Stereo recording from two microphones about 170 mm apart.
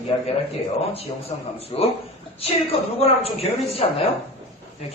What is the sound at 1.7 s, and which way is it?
Speech, 35° left (ahead or behind).